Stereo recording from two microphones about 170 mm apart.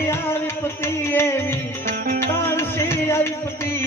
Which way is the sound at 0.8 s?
15° left (ahead or behind).